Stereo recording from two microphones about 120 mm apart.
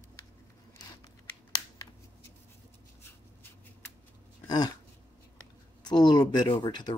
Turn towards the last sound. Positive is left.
turn(degrees=35)  # may be behind; listen again after turning